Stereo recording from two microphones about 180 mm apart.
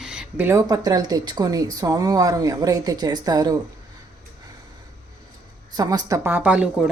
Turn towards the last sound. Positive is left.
turn(degrees=-5)  # may be behind; listen again after turning